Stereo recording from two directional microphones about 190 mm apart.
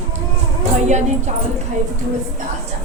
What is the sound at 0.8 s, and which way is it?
Speech, 40° right (ahead or behind).